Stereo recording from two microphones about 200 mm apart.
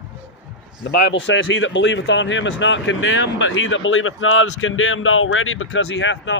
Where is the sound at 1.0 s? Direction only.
65° left (ahead or behind).